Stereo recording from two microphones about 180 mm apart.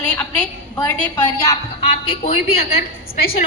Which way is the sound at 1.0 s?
15° left (ahead or behind).